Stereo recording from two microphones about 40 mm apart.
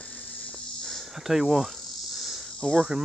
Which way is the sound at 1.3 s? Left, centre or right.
Centre.